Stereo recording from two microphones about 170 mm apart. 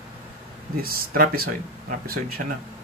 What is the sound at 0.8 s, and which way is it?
Speech, 60° right (ahead or behind).